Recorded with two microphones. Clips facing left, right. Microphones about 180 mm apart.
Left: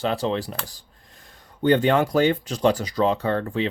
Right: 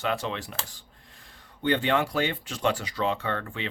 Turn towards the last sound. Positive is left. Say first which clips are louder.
# left 8 dB
turn(degrees=35)  # may be behind; listen again after turning